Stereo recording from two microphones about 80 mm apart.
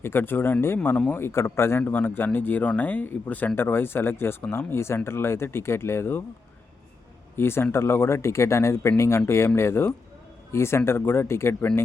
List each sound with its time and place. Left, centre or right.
0.0 s speech: left
7.3 s speech: left